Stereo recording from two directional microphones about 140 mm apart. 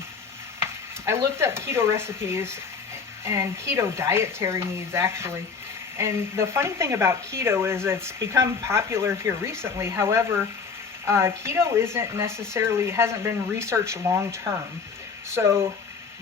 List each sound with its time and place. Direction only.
0.6 s speech: 20° right (ahead or behind)